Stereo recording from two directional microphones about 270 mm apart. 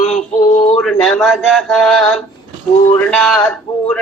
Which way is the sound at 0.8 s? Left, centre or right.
Centre.